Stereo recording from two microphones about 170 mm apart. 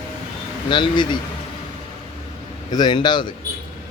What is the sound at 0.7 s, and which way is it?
Speech, 25° left (ahead or behind).